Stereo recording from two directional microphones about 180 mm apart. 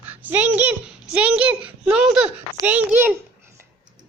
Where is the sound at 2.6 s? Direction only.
10° right (ahead or behind).